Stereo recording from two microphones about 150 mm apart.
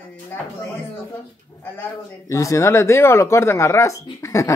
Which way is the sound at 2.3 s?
20° left (ahead or behind).